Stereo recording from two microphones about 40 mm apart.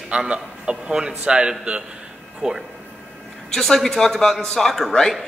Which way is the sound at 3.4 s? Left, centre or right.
Centre.